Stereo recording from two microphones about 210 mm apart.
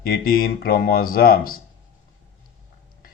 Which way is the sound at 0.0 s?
45° left (ahead or behind).